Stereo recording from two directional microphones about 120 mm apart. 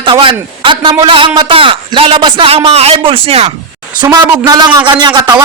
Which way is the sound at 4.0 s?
35° right (ahead or behind).